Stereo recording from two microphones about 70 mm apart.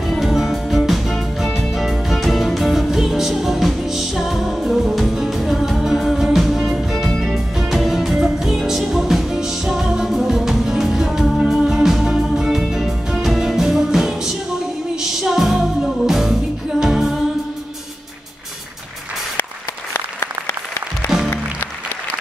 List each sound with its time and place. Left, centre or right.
0.2 s music: centre
19.9 s applause: left